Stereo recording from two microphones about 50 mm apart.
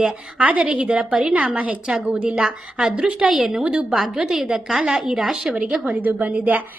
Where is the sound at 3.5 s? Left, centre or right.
Centre.